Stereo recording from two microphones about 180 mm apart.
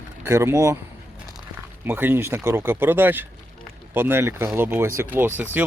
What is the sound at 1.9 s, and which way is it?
Speech, 10° right (ahead or behind).